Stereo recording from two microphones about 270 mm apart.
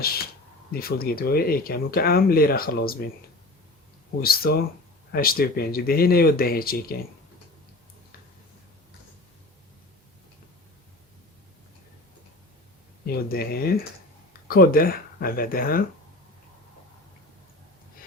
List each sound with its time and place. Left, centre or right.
0.7 s speech: left
4.2 s speech: left
13.1 s speech: left